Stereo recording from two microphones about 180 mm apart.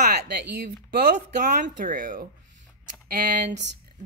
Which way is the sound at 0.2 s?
65° right (ahead or behind).